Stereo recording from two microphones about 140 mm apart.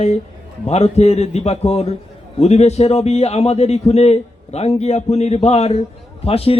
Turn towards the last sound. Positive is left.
turn(degrees=45)  # may be behind; listen again after turning